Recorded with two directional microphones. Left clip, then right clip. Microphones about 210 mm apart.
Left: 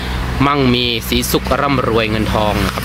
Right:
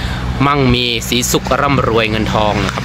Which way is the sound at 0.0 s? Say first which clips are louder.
Right 1 dB; 10° left (ahead or behind).